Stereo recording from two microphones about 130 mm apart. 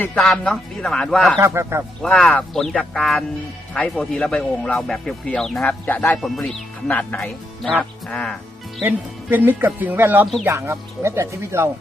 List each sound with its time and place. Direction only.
0.0 s speech: 10° left (ahead or behind)
1.4 s speech: 20° right (ahead or behind)
2.0 s speech: 5° left (ahead or behind)
6.2 s speech: centre (ahead or behind)
8.8 s speech: 15° right (ahead or behind)